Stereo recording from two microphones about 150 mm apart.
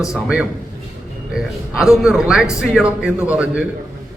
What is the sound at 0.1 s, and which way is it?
A man's voice, 5° right (ahead or behind).